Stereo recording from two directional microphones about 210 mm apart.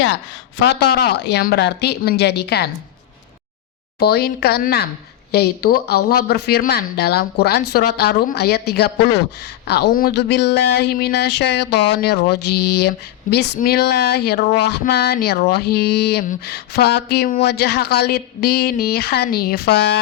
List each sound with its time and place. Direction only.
0.6 s speech: 50° left (ahead or behind)
4.0 s speech: 50° left (ahead or behind)